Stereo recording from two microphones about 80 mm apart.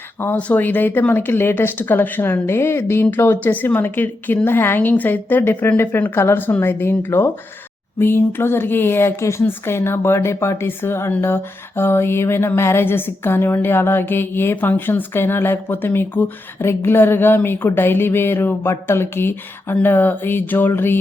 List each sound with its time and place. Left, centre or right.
0.3 s a woman's voice: centre